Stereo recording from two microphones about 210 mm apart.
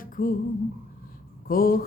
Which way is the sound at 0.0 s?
40° left (ahead or behind).